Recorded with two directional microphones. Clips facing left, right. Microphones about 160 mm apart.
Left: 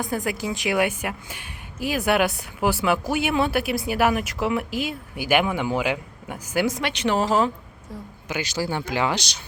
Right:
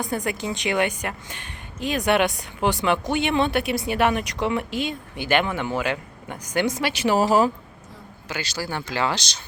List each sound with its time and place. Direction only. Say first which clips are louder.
0.0 s a woman's voice: even; centre (ahead or behind)
8.3 s speech: left 3 dB; 20° left (ahead or behind)